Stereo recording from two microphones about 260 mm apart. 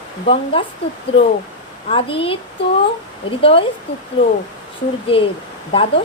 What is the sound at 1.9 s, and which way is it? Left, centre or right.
Speech, left.